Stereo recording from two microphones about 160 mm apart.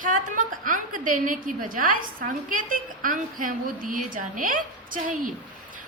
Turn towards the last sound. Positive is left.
turn(degrees=-55)  # may be behind; listen again after turning